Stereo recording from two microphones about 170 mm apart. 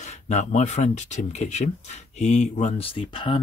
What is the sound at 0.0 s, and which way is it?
Speech, 45° left (ahead or behind).